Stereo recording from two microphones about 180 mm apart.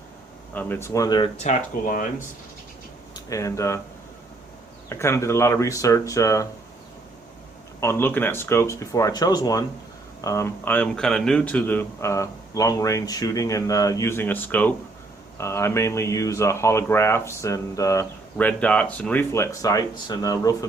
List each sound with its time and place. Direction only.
0.5 s speech: 10° left (ahead or behind)
1.5 s speech: 50° left (ahead or behind)
3.2 s speech: 15° left (ahead or behind)
4.9 s speech: 15° left (ahead or behind)
7.8 s speech: 15° left (ahead or behind)